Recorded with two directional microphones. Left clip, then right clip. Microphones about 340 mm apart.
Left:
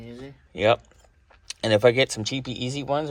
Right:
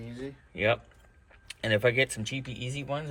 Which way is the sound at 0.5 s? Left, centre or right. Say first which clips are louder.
Left 7 dB; centre.